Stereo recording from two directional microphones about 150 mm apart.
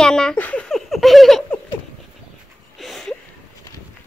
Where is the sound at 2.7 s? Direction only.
Centre (ahead or behind).